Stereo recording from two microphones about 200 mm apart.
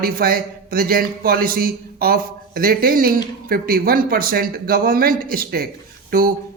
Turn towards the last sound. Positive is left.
turn(degrees=-45)  # may be behind; listen again after turning